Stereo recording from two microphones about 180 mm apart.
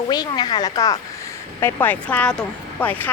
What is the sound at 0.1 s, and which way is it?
Speech, 25° left (ahead or behind).